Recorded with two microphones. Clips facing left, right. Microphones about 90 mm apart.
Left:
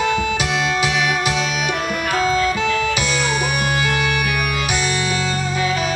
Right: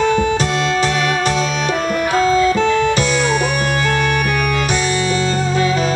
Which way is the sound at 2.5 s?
40° right (ahead or behind).